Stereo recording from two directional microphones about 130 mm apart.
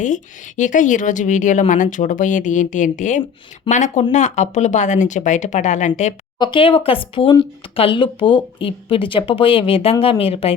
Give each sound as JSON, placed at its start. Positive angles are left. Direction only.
{"t": 0.0, "sound": "a woman's voice", "side_deg": 75}
{"t": 6.4, "sound": "speech", "side_deg": 40}